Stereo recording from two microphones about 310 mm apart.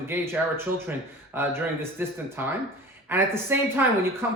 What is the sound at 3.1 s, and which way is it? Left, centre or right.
Speech, centre.